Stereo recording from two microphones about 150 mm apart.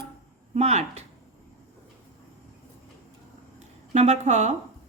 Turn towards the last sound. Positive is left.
turn(degrees=-50)  # may be behind; listen again after turning